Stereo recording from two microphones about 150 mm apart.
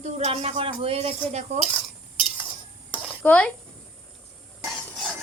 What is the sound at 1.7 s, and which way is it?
Cutlery, 5° right (ahead or behind).